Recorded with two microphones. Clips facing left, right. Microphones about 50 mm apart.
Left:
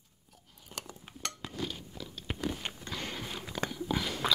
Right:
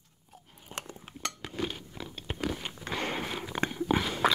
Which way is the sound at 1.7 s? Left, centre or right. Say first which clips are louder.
Right 2 dB; right.